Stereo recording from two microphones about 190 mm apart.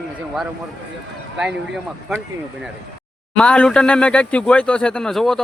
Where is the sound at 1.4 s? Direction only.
5° right (ahead or behind).